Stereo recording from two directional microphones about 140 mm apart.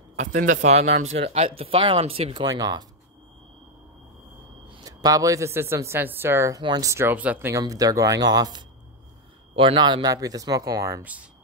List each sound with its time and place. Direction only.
0.1 s speech: 60° right (ahead or behind); by 2.8 s 30° right (ahead or behind)
4.6 s a man's voice: 25° right (ahead or behind)
7.5 s a man's voice: 25° right (ahead or behind)